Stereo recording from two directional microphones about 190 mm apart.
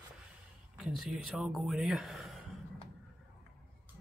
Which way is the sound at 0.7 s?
Centre (ahead or behind).